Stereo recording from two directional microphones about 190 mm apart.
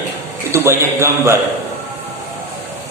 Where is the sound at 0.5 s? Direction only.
15° right (ahead or behind).